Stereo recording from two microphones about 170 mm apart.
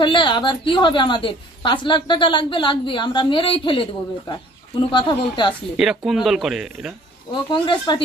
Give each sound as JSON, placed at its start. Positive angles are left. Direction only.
{"t": 0.0, "sound": "a woman's voice", "side_deg": 30}
{"t": 5.8, "sound": "speech", "side_deg": 0}
{"t": 7.5, "sound": "a woman's voice", "side_deg": 30}